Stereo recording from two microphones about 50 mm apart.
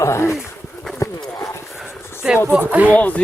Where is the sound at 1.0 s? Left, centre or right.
Left.